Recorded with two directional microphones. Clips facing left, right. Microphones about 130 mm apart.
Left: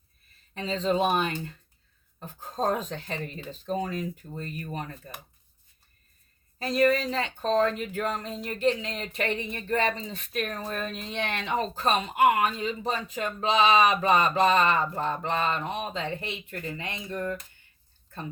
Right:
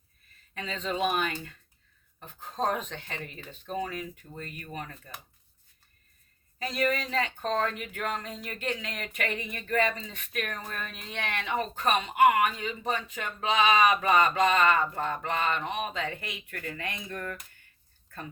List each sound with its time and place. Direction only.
0.5 s speech: 30° left (ahead or behind)
6.6 s speech: 35° left (ahead or behind)